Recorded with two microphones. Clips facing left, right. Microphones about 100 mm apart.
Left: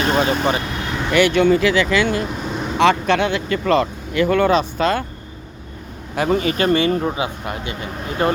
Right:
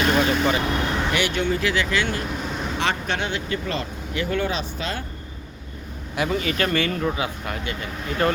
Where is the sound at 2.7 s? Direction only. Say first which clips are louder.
Left 11 dB; 90° left; by 5.0 s 55° left (ahead or behind).